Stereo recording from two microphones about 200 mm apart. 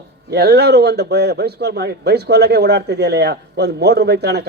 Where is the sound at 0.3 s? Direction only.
55° right (ahead or behind).